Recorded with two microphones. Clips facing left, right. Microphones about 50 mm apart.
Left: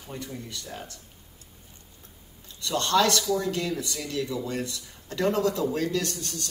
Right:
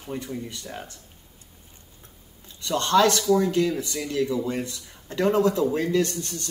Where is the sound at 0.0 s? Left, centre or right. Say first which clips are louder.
Right 5 dB; right.